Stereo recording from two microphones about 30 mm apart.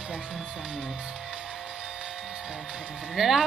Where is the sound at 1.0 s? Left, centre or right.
Centre.